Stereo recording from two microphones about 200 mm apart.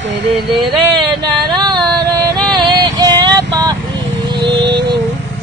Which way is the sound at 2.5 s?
20° right (ahead or behind).